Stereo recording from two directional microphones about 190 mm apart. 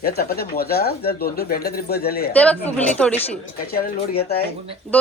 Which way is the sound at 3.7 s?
55° left (ahead or behind).